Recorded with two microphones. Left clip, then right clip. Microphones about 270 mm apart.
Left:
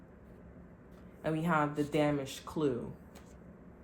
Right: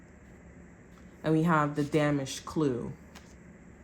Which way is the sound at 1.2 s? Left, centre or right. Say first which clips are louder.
Right 5 dB; right.